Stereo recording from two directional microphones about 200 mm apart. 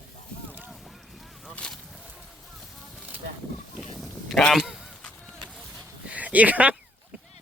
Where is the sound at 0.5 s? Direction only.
5° right (ahead or behind).